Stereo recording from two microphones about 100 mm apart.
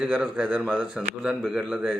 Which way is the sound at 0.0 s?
10° right (ahead or behind).